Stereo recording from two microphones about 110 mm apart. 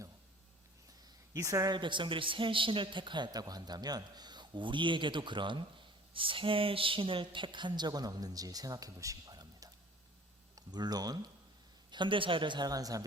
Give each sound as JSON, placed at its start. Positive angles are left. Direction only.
{"t": 1.3, "sound": "a man's voice", "side_deg": -30}